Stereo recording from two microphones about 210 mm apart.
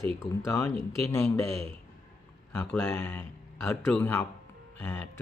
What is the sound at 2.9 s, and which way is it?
Speech, 10° left (ahead or behind).